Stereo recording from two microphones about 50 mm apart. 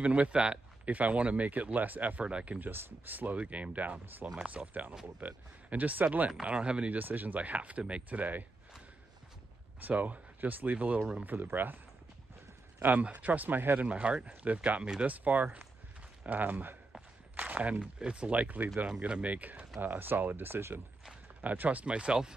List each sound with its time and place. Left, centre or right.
0.0 s speech: right
2.6 s speech: right
4.0 s speech: right
6.4 s speech: right
6.9 s speech: right
9.8 s speech: right
12.8 s speech: right
13.8 s speech: right
18.9 s speech: right
20.0 s speech: right
21.4 s speech: right